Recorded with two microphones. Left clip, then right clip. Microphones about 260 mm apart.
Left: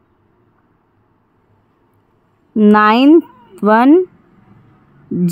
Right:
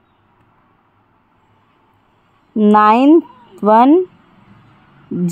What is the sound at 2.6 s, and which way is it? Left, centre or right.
Speech, centre.